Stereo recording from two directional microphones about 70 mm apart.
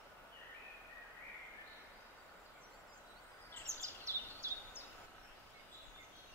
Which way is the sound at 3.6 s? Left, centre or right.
Right.